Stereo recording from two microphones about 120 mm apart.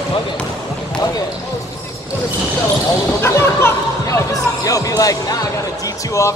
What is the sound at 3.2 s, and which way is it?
Speech, 20° left (ahead or behind).